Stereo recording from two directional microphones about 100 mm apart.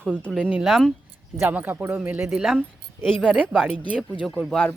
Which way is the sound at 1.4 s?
20° right (ahead or behind).